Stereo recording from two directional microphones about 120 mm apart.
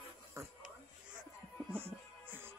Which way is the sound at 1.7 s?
20° right (ahead or behind).